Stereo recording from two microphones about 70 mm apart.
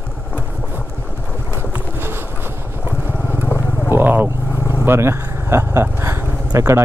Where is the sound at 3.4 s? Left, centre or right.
Left.